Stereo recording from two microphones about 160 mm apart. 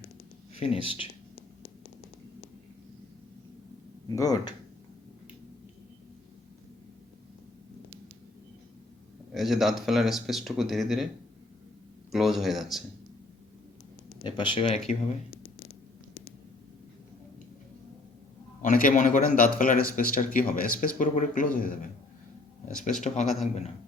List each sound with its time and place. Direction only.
0.6 s speech: 35° left (ahead or behind)
4.1 s speech: 25° left (ahead or behind)
9.3 s speech: centre (ahead or behind)
12.1 s speech: centre (ahead or behind)
14.3 s speech: 30° left (ahead or behind)
18.6 s speech: 60° left (ahead or behind)